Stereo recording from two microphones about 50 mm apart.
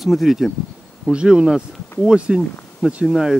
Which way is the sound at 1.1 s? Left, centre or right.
Centre.